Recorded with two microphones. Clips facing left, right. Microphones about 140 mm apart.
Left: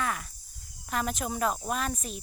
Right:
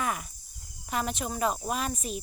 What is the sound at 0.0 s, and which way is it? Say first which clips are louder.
Cricket: right 1 dB; 10° right (ahead or behind).